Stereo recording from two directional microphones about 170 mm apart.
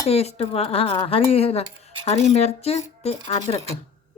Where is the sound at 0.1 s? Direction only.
35° left (ahead or behind).